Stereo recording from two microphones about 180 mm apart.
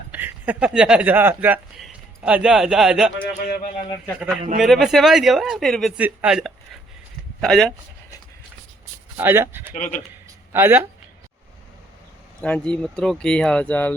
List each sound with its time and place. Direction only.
0.1 s speech: 10° right (ahead or behind)
3.2 s a man's voice: 55° left (ahead or behind)
4.5 s speech: centre (ahead or behind)
9.1 s speech: 10° right (ahead or behind)
9.7 s a man's voice: 45° left (ahead or behind)
10.5 s speech: 15° right (ahead or behind)
12.4 s speech: 5° left (ahead or behind)